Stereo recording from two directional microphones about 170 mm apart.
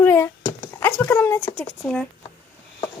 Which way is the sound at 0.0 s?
15° left (ahead or behind).